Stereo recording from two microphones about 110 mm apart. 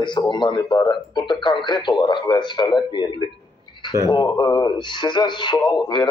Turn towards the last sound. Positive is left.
turn(degrees=40)  # may be behind; listen again after turning